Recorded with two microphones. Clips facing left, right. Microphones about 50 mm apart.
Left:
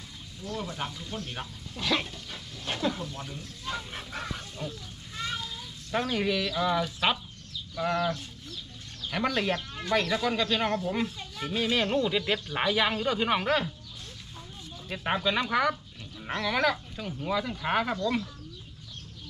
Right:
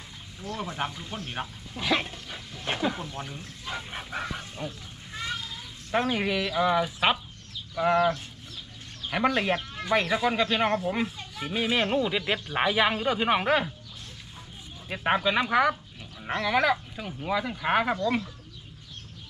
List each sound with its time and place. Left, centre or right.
0.4 s speech: right
5.9 s speech: right
14.9 s speech: centre